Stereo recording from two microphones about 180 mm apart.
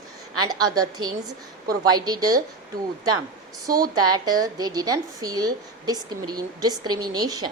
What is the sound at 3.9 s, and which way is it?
A woman's voice, 20° right (ahead or behind).